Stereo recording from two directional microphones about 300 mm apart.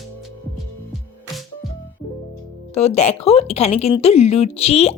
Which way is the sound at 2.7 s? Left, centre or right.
Left.